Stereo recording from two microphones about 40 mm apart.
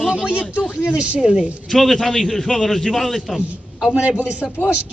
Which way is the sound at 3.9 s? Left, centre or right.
Right.